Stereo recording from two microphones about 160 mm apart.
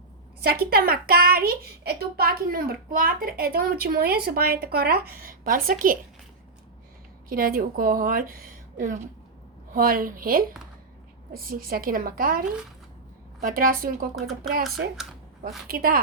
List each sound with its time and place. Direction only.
0.6 s a child's voice: 70° right (ahead or behind)
7.3 s a woman's voice: 65° right (ahead or behind)
13.4 s a woman's voice: 65° right (ahead or behind)
14.9 s a sound: 5° right (ahead or behind)
15.6 s a child's voice: 65° right (ahead or behind)